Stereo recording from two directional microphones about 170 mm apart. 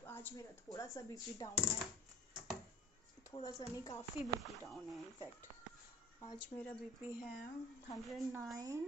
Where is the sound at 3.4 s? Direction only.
20° left (ahead or behind).